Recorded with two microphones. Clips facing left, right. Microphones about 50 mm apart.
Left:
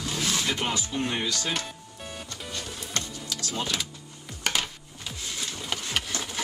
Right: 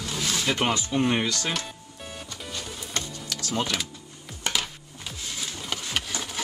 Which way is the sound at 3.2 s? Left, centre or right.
Right.